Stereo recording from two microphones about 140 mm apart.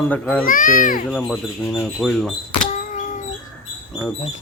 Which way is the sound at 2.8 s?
65° left (ahead or behind).